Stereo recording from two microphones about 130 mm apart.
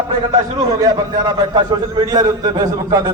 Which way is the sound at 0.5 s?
30° right (ahead or behind).